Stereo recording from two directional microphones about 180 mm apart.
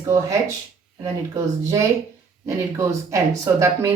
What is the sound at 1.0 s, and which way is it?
Speech, 15° right (ahead or behind).